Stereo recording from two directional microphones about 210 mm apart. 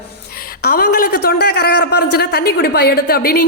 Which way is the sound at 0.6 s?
45° left (ahead or behind).